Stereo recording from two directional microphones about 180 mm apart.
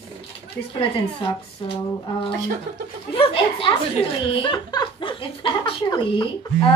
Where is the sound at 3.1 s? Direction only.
30° left (ahead or behind).